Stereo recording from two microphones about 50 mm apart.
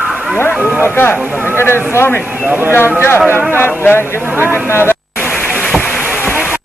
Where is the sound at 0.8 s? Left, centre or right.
Left.